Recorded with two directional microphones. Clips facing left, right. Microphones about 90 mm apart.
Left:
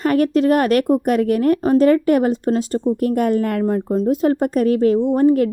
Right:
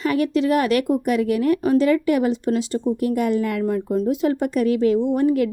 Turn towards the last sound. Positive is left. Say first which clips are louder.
# left 4 dB
turn(degrees=40)  # may be behind; listen again after turning